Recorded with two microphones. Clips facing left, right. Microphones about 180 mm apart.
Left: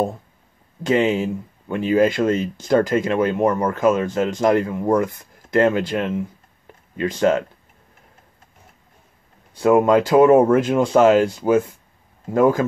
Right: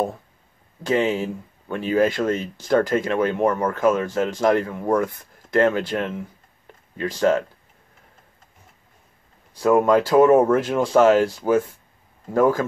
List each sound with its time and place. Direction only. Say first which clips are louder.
0.8 s speech: left 3 dB; 15° left (ahead or behind)
9.6 s speech: left 2 dB; 20° left (ahead or behind)